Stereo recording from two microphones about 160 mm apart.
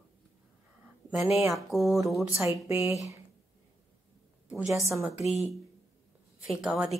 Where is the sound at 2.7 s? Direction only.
20° right (ahead or behind).